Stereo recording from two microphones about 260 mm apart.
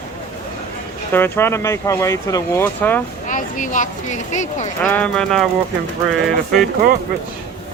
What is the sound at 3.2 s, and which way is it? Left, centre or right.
Speech, left.